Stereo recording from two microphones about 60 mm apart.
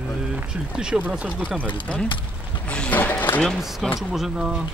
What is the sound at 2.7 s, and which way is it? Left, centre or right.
Speech, left.